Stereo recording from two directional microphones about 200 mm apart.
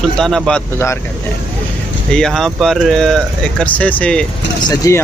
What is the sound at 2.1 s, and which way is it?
Speech, 5° left (ahead or behind).